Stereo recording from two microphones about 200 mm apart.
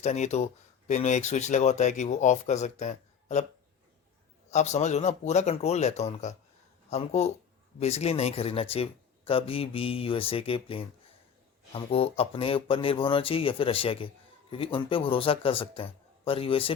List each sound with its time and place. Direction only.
0.0 s speech: 35° left (ahead or behind)
4.5 s speech: 35° left (ahead or behind)